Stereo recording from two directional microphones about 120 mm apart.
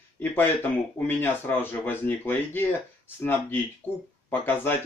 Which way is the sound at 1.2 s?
15° left (ahead or behind).